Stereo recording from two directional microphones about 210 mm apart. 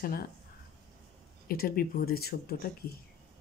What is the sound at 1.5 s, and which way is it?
Speech, 45° left (ahead or behind).